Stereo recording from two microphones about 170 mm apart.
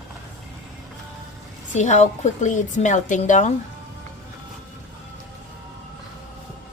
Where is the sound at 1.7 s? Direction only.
45° left (ahead or behind).